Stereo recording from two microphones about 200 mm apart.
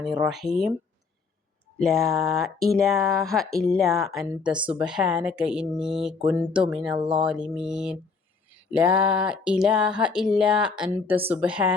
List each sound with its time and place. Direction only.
0.0 s speech: 5° right (ahead or behind)
1.8 s speech: centre (ahead or behind)
6.9 s speech: 25° right (ahead or behind)
7.3 s speech: 5° right (ahead or behind)